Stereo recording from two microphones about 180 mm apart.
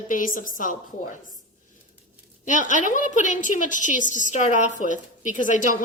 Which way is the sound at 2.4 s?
45° left (ahead or behind).